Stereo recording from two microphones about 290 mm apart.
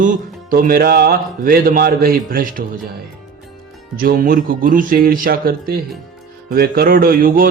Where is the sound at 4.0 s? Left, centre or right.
Right.